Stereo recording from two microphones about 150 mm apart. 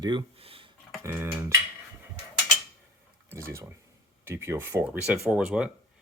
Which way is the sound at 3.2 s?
20° right (ahead or behind).